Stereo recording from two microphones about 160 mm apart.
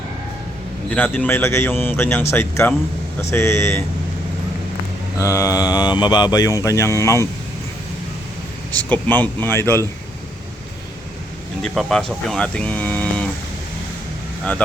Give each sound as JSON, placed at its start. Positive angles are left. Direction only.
{"t": 0.9, "sound": "speech", "side_deg": 10}
{"t": 5.2, "sound": "mantra", "side_deg": 20}
{"t": 8.7, "sound": "speech", "side_deg": 10}
{"t": 11.6, "sound": "speech", "side_deg": 0}